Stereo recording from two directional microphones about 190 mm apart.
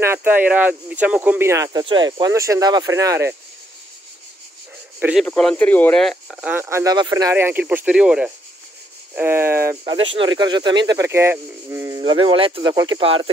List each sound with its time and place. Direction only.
0.0 s speech: 10° right (ahead or behind)
5.2 s speech: 5° left (ahead or behind); by 9.8 s 15° right (ahead or behind)
9.8 s speech: 25° right (ahead or behind)